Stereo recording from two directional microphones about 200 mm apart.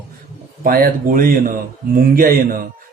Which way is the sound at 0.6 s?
45° right (ahead or behind).